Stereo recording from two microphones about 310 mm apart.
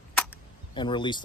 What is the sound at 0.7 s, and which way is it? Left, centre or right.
Speech, centre.